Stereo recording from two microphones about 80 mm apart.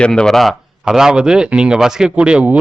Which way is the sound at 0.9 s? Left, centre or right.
Centre.